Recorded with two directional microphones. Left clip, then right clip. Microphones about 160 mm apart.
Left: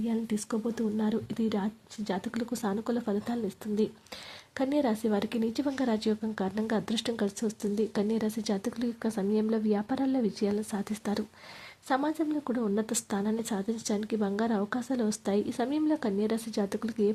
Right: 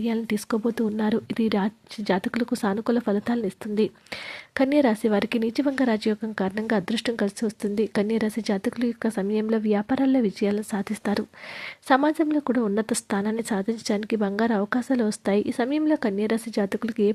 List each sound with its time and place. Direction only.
0.0 s speech: 40° right (ahead or behind); by 17.1 s 25° right (ahead or behind)